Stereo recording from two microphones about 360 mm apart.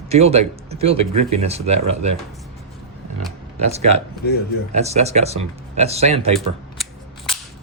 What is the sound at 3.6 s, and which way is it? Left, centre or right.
Speech, centre.